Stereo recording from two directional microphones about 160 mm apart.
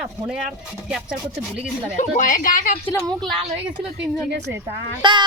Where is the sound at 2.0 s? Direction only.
55° left (ahead or behind).